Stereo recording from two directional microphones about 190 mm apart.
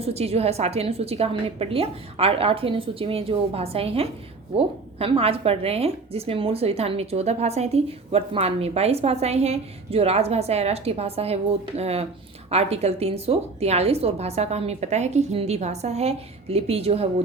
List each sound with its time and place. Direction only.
0.0 s a woman's voice: 30° right (ahead or behind)